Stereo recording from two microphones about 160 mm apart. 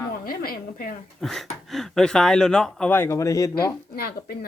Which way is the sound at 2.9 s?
15° left (ahead or behind).